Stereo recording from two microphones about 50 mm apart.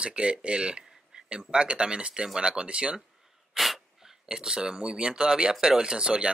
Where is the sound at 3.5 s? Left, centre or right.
Centre.